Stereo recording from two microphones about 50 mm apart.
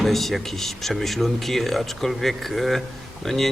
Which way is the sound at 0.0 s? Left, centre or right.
Centre.